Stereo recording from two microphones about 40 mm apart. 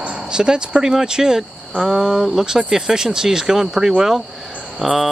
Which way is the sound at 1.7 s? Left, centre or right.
Centre.